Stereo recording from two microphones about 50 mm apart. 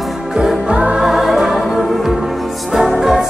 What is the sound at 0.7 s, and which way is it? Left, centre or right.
Music, right.